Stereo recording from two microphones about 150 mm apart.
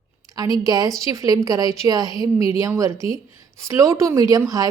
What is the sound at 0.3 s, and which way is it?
A woman's voice, 25° right (ahead or behind).